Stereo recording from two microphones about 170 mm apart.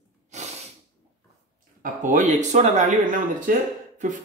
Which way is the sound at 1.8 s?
50° right (ahead or behind).